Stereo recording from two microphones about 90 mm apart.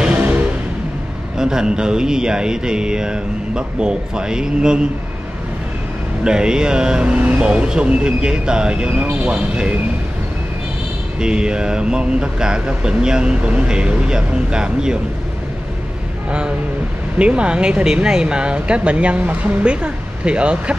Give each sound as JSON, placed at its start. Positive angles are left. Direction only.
{"t": 0.0, "sound": "music", "side_deg": -15}
{"t": 1.4, "sound": "speech", "side_deg": -5}
{"t": 6.2, "sound": "speech", "side_deg": -10}
{"t": 11.1, "sound": "speech", "side_deg": -10}
{"t": 16.3, "sound": "speech", "side_deg": -10}